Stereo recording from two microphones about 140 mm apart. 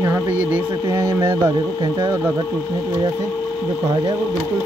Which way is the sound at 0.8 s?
35° right (ahead or behind).